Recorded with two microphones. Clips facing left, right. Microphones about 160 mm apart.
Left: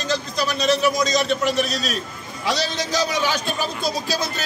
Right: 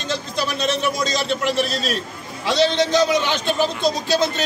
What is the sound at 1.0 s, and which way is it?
Speech, 30° right (ahead or behind).